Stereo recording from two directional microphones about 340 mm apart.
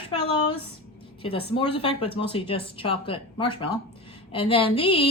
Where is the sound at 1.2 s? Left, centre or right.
Centre.